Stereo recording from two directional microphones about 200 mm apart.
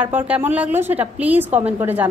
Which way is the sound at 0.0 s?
10° right (ahead or behind).